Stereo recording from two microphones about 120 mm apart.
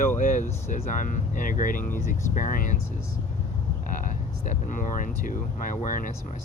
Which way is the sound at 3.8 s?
90° left.